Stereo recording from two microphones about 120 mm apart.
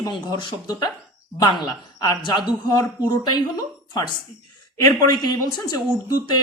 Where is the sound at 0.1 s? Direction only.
40° left (ahead or behind).